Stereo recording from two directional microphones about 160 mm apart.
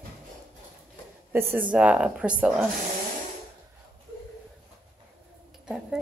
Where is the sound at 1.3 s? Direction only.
15° right (ahead or behind).